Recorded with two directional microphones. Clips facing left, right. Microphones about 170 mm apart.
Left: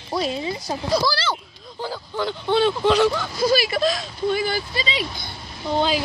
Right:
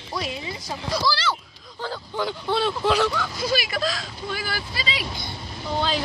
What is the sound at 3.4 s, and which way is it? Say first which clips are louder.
Speech: left 7 dB; 35° left (ahead or behind).